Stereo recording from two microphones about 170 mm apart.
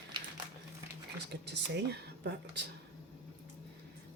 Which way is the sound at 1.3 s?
80° right.